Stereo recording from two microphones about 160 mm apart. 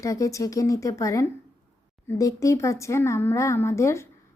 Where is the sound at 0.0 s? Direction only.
20° left (ahead or behind).